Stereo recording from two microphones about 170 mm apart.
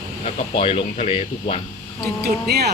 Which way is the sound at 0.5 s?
35° left (ahead or behind).